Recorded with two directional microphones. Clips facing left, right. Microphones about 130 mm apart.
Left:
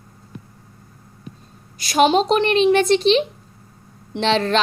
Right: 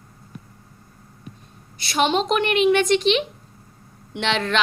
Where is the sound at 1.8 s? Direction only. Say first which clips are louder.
Left 5 dB; 40° left (ahead or behind).